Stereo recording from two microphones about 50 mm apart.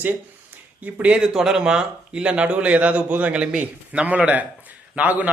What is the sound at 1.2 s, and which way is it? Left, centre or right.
A man's voice, centre.